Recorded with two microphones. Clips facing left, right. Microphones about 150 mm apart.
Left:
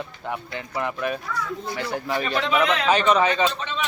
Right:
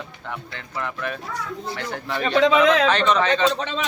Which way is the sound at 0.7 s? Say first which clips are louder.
Left 3 dB; 20° left (ahead or behind).